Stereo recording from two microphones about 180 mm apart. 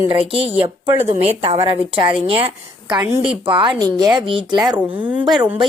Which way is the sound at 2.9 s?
20° right (ahead or behind).